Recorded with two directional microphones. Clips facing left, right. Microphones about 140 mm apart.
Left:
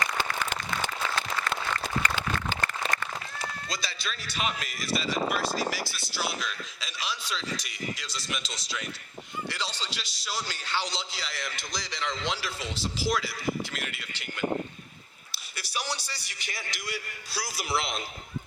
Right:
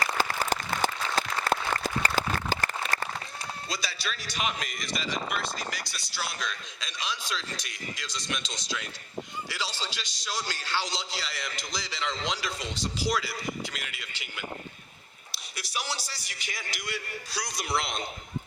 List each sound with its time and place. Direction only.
0.0 s applause: 40° right (ahead or behind)
3.7 s a man's voice: centre (ahead or behind)
15.5 s a man's voice: centre (ahead or behind)